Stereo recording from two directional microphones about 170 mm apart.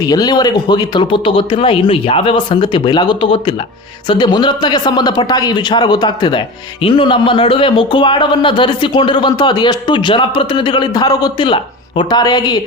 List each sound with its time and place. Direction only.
0.0 s speech: 25° left (ahead or behind)